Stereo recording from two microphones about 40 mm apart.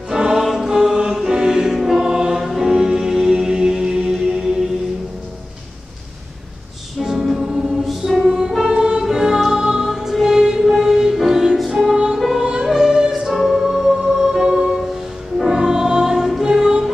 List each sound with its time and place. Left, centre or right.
0.1 s music: centre
1.1 s choir: centre
2.5 s music: centre
7.1 s music: centre
8.6 s music: centre
11.9 s music: centre
13.4 s music: centre